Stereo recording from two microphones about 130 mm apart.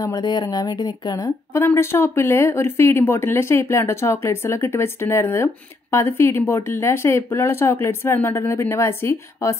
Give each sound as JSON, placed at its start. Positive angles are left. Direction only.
{"t": 0.0, "sound": "speech", "side_deg": 30}
{"t": 1.6, "sound": "speech", "side_deg": 15}